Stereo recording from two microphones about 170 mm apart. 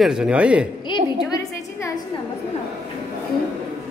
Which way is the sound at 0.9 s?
25° left (ahead or behind).